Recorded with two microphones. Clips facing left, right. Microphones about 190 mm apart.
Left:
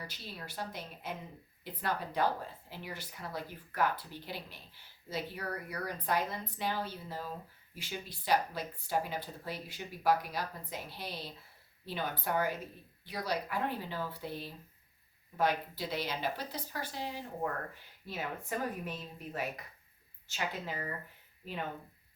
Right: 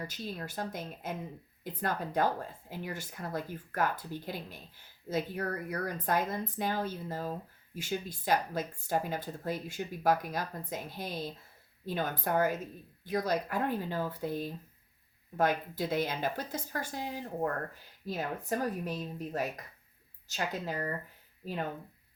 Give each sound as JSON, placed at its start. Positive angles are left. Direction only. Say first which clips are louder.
{"t": 0.0, "sound": "speech", "louder": "right 7 dB", "side_deg": -45}
{"t": 18.0, "sound": "a woman's voice", "louder": "right 4 dB", "side_deg": -40}